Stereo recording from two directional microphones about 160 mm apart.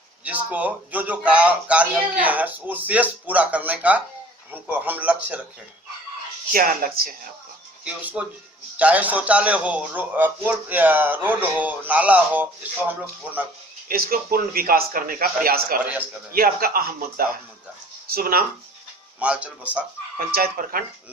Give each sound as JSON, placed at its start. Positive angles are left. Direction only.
{"t": 0.3, "sound": "a man's voice", "side_deg": -10}
{"t": 6.5, "sound": "speech", "side_deg": -60}
{"t": 7.9, "sound": "a man's voice", "side_deg": -5}
{"t": 13.8, "sound": "a man's voice", "side_deg": -70}
{"t": 19.2, "sound": "a man's voice", "side_deg": -10}
{"t": 20.1, "sound": "speech", "side_deg": -65}